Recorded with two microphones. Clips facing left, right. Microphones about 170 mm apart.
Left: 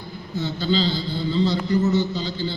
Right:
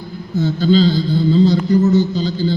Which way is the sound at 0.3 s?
45° right (ahead or behind).